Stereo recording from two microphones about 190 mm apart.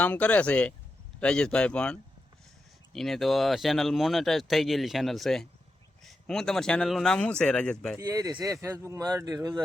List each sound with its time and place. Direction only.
0.0 s speech: 10° left (ahead or behind)
7.9 s speech: 15° right (ahead or behind)